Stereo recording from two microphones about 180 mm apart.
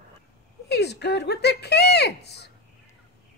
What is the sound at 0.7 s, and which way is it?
Speech, 65° left (ahead or behind).